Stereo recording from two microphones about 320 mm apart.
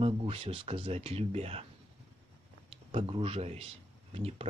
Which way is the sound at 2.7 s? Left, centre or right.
Centre.